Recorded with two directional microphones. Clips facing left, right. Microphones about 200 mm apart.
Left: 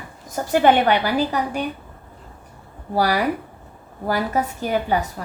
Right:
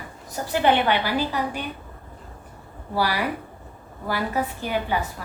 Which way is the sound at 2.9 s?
45° left (ahead or behind).